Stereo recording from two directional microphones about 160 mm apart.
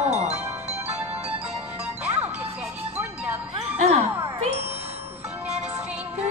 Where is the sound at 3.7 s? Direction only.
45° right (ahead or behind).